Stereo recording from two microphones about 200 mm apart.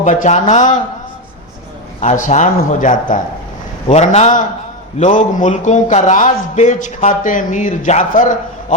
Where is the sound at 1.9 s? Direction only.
40° left (ahead or behind).